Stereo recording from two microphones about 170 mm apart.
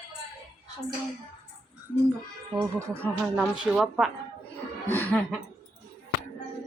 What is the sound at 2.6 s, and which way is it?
Speech, 15° right (ahead or behind).